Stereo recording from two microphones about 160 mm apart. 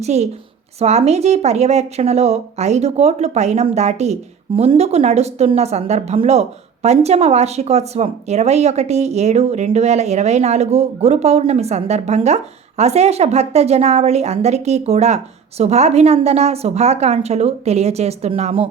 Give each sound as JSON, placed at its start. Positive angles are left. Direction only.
{"t": 0.0, "sound": "a woman's voice", "side_deg": -40}